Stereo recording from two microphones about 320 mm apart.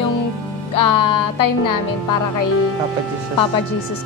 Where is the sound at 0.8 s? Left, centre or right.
Left.